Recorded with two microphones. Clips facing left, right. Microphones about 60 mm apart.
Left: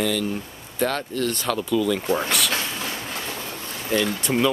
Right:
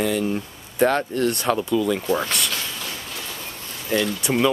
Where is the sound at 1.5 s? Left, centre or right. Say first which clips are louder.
Right 1 dB; centre.